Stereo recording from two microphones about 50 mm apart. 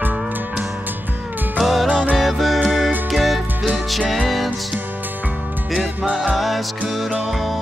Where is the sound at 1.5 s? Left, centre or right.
Centre.